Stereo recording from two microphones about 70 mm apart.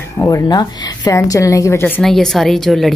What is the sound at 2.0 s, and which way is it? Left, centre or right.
Speech, centre.